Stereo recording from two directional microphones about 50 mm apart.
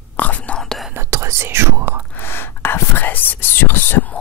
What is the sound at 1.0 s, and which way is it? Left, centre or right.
Whispering, right.